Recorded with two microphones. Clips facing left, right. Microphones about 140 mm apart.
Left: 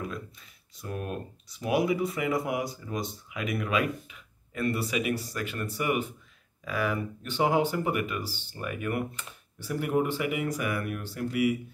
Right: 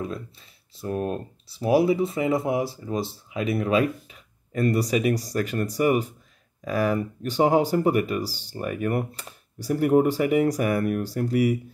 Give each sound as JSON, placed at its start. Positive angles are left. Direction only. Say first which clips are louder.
{"t": 0.0, "sound": "speech", "louder": "right 5 dB", "side_deg": -30}